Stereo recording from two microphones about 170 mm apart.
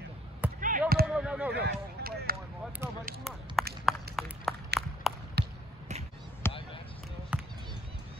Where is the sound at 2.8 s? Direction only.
15° right (ahead or behind).